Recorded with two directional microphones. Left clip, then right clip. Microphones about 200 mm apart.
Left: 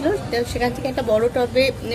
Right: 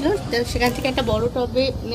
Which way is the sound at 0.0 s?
20° right (ahead or behind).